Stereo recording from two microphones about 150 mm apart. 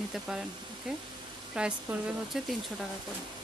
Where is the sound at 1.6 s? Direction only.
5° right (ahead or behind).